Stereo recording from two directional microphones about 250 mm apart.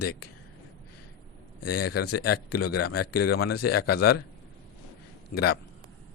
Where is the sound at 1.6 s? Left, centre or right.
Left.